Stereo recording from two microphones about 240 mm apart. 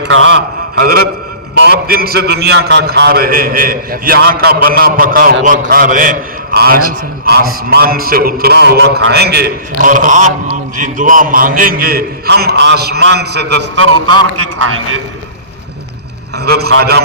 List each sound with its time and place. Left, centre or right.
0.0 s a man's voice: right
0.8 s a man's voice: right
16.4 s a man's voice: right